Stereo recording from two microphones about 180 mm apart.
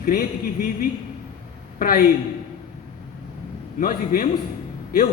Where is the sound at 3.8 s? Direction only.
55° left (ahead or behind).